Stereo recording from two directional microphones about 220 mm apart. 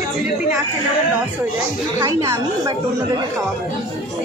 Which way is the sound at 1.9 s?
15° right (ahead or behind).